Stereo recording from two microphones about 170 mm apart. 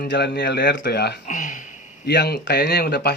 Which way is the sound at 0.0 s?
85° left.